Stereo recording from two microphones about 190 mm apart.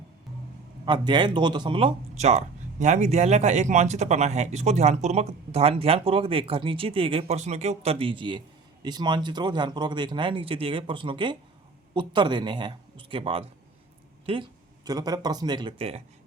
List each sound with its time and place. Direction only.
0.9 s a man's voice: 25° right (ahead or behind)
14.8 s a man's voice: 20° right (ahead or behind)